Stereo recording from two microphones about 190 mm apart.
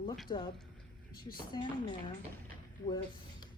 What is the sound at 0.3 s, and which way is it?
Speech, 25° left (ahead or behind).